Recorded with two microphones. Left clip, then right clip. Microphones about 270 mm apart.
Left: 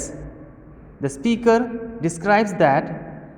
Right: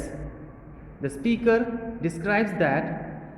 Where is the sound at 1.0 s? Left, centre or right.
Left.